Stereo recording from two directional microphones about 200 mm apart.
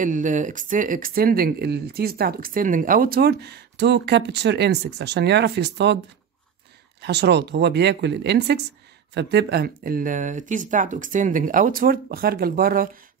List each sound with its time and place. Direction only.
0.0 s speech: 40° right (ahead or behind); by 5.9 s 60° right (ahead or behind)
7.0 s speech: 55° right (ahead or behind)